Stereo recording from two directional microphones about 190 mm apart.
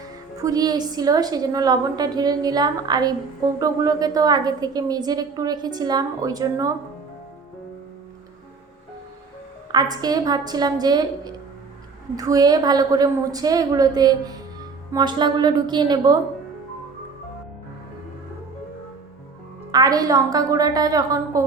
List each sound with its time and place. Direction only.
0.3 s a woman's voice: 20° right (ahead or behind)
9.7 s a woman's voice: 20° right (ahead or behind)
19.7 s a woman's voice: 20° right (ahead or behind)